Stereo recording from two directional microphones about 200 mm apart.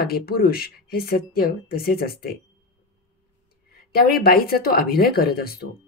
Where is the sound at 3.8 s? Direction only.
50° left (ahead or behind).